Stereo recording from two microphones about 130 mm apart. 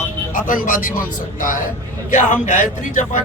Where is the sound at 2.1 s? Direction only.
75° left (ahead or behind).